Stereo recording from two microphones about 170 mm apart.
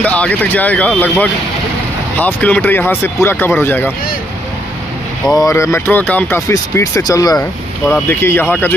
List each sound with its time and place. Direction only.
0.0 s speech: 10° left (ahead or behind)
5.3 s speech: 20° left (ahead or behind)
7.3 s speech: 5° left (ahead or behind)